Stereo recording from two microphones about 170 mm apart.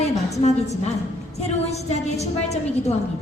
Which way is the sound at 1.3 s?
40° left (ahead or behind).